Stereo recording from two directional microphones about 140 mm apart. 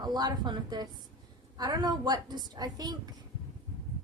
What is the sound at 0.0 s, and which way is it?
A woman's voice, 30° right (ahead or behind).